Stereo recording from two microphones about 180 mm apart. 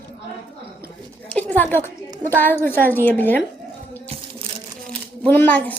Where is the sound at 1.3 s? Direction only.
10° left (ahead or behind).